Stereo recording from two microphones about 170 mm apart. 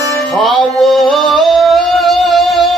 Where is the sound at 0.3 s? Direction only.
Centre (ahead or behind).